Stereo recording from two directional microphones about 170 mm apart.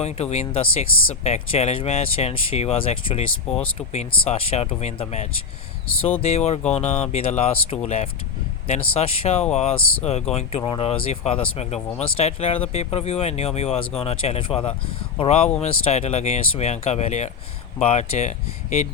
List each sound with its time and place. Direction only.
0.0 s speech: 40° left (ahead or behind)